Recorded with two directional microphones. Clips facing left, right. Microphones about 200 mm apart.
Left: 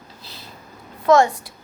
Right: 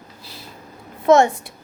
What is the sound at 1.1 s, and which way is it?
Speech, 25° right (ahead or behind).